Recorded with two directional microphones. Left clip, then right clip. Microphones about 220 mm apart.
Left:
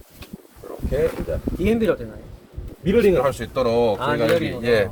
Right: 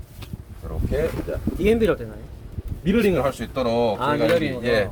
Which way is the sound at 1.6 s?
35° right (ahead or behind).